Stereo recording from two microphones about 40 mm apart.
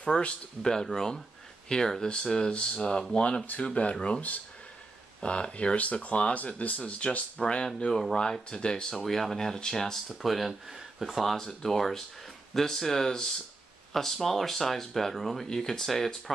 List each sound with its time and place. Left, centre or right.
0.0 s speech: left
5.2 s speech: left
5.8 s speech: left
6.8 s speech: left
7.6 s speech: centre
8.9 s speech: centre
10.0 s speech: centre
11.3 s speech: centre